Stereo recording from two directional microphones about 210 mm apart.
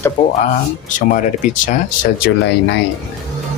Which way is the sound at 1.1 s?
40° left (ahead or behind).